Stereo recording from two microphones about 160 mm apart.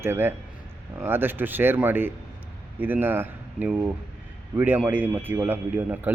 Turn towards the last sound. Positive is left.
turn(degrees=-10)  # may be behind; listen again after turning